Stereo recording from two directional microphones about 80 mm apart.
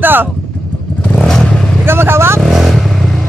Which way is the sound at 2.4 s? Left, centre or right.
Centre.